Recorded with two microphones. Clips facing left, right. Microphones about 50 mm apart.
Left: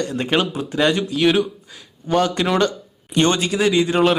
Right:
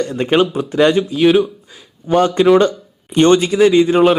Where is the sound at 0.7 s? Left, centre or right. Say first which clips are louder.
Right 5 dB; centre.